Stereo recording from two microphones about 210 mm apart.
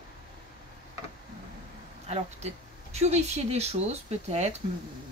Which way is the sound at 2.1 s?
30° right (ahead or behind).